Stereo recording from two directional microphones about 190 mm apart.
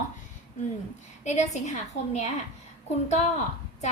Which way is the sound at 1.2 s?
40° left (ahead or behind).